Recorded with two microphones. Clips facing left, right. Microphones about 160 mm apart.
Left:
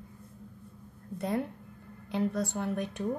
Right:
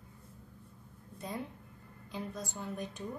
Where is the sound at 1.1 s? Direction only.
65° left (ahead or behind).